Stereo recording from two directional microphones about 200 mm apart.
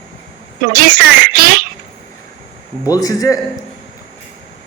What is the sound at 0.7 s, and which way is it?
Speech, 45° right (ahead or behind).